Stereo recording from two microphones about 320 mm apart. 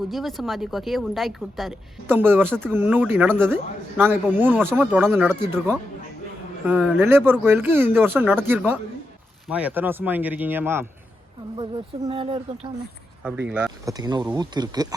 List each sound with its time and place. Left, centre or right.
0.0 s speech: centre
13.5 s speech: centre